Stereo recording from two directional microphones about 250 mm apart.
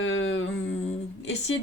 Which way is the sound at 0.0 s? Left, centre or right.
Left.